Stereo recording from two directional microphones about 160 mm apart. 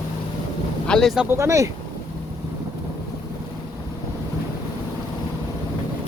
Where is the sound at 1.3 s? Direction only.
15° right (ahead or behind).